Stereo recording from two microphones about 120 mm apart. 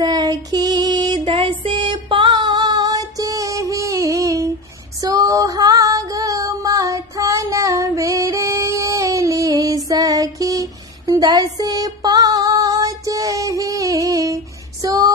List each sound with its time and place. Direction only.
0.0 s music: 35° right (ahead or behind)
5.0 s female singing: 30° right (ahead or behind)